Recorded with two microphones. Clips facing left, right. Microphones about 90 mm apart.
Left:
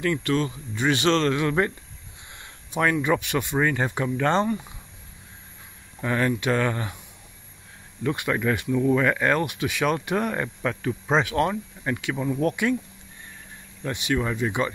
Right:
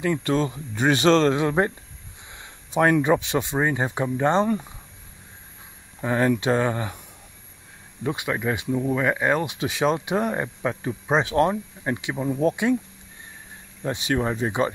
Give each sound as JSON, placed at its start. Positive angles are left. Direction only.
{"t": 0.0, "sound": "speech", "side_deg": -25}
{"t": 2.7, "sound": "speech", "side_deg": -35}
{"t": 5.9, "sound": "speech", "side_deg": -25}
{"t": 8.0, "sound": "speech", "side_deg": -15}
{"t": 9.6, "sound": "speech", "side_deg": -25}
{"t": 13.8, "sound": "speech", "side_deg": -35}